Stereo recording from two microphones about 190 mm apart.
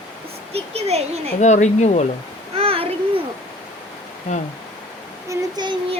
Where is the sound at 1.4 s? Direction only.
40° left (ahead or behind).